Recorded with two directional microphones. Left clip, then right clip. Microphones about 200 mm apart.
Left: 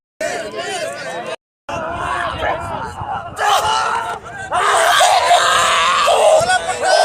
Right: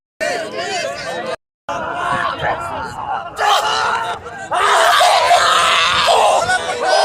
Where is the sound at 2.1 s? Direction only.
5° left (ahead or behind).